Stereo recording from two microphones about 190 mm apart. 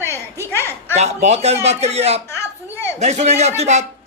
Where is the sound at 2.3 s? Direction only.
15° left (ahead or behind).